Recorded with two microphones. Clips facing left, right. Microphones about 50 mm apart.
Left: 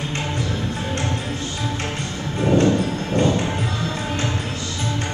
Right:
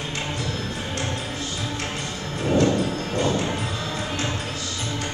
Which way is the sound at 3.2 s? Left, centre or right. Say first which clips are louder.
Left 4 dB; left.